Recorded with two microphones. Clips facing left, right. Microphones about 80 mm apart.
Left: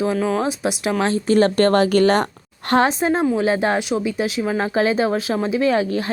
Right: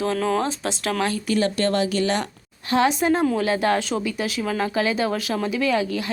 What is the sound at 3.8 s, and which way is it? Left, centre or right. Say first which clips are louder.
A woman's voice: left 4 dB; centre.